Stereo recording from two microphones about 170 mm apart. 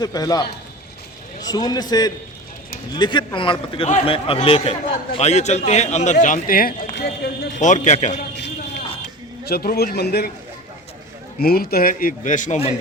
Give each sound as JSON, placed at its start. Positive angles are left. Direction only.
{"t": 0.0, "sound": "a man's voice", "side_deg": 20}
{"t": 7.6, "sound": "a man's voice", "side_deg": 45}
{"t": 8.4, "sound": "a sound", "side_deg": 85}
{"t": 9.4, "sound": "a man's voice", "side_deg": 65}
{"t": 11.3, "sound": "a man's voice", "side_deg": 60}